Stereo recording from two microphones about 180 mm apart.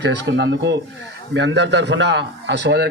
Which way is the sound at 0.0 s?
75° right (ahead or behind).